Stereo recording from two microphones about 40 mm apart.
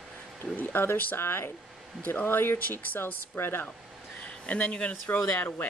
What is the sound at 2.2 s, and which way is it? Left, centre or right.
A woman's voice, left.